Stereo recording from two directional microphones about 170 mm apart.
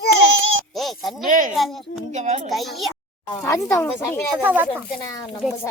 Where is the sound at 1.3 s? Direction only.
50° right (ahead or behind).